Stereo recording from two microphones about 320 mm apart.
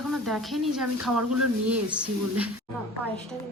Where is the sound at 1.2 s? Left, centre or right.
Right.